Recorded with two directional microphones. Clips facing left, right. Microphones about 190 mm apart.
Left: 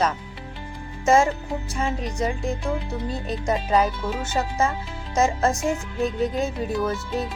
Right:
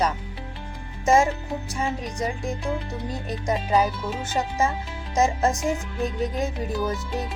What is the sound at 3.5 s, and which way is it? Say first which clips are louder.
Speech: even; centre (ahead or behind).